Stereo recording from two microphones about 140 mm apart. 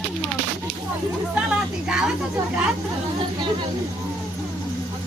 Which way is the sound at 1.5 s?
5° right (ahead or behind).